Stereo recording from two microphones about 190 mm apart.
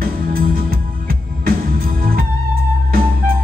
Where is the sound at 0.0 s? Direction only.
50° right (ahead or behind).